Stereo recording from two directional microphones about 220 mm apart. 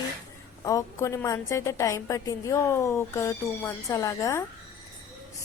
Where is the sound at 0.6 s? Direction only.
15° left (ahead or behind).